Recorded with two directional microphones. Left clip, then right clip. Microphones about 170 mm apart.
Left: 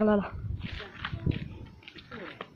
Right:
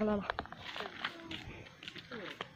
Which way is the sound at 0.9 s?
25° right (ahead or behind).